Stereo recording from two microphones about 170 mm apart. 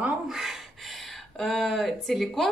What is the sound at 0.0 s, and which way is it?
Speech, centre (ahead or behind).